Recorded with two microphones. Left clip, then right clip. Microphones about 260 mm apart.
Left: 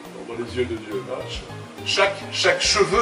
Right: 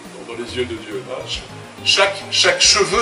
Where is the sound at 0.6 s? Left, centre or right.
Centre.